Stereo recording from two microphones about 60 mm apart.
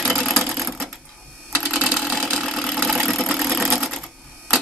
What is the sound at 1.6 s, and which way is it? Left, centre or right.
Sewing machine, right.